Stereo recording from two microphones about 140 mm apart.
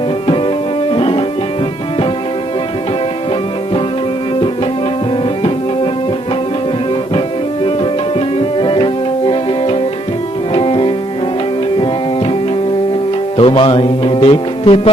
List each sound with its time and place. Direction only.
0.9 s music: 40° left (ahead or behind)
5.4 s music: 40° left (ahead or behind)
8.4 s music: 35° left (ahead or behind)